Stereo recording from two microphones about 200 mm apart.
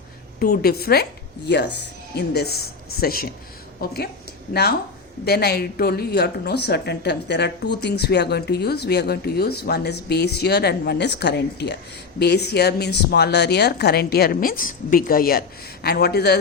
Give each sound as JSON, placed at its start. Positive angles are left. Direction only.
{"t": 0.3, "sound": "a woman's voice", "side_deg": 50}
{"t": 5.2, "sound": "a woman's voice", "side_deg": 55}